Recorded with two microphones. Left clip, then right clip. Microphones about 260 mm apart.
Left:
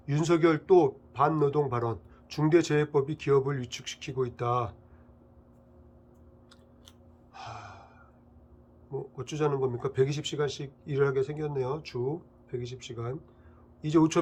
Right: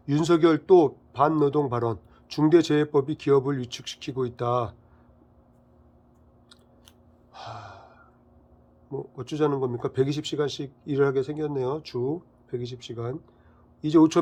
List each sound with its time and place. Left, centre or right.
0.0 s a man's voice: right
7.3 s gasp: right
8.9 s a man's voice: right